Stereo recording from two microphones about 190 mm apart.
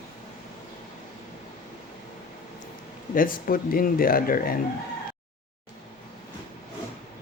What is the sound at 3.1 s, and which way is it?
Speech, 50° left (ahead or behind).